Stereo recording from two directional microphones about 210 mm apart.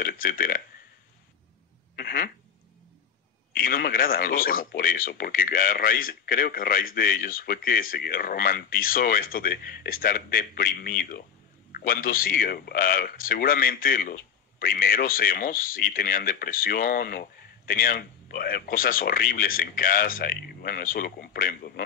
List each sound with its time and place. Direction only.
0.0 s a man's voice: 45° left (ahead or behind)
2.0 s speech: 45° left (ahead or behind)
3.5 s a man's voice: 45° left (ahead or behind)